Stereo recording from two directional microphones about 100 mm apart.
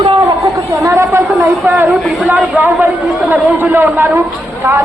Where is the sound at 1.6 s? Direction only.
20° right (ahead or behind).